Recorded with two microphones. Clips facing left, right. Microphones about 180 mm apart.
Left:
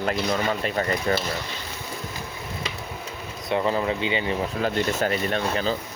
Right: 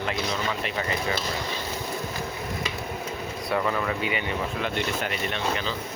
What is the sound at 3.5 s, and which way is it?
Speech, 25° left (ahead or behind).